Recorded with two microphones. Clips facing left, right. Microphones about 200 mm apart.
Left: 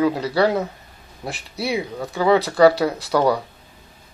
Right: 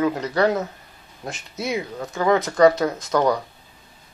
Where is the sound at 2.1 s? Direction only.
10° left (ahead or behind).